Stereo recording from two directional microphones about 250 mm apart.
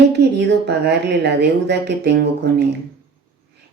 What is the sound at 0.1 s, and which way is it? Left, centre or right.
Speech, right.